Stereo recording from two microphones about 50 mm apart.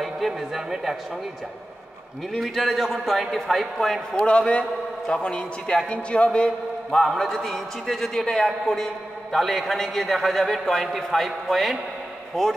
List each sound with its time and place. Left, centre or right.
0.0 s speech: centre
2.3 s a man's voice: centre
4.3 s a man's voice: left
6.9 s a man's voice: centre